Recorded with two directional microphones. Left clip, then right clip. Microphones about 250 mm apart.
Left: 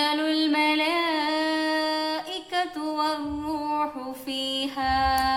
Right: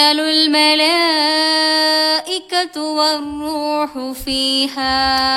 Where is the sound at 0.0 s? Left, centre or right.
Right.